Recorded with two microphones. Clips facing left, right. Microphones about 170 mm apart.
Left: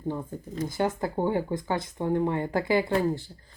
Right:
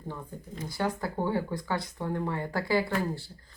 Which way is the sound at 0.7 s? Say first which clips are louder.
Left 2 dB; 20° left (ahead or behind).